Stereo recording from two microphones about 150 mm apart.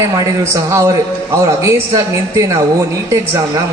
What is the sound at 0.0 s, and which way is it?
A man's voice, 25° right (ahead or behind).